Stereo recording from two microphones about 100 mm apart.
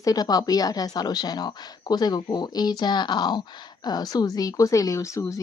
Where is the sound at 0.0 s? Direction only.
40° left (ahead or behind).